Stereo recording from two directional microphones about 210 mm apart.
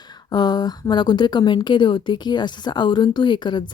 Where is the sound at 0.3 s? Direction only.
20° left (ahead or behind).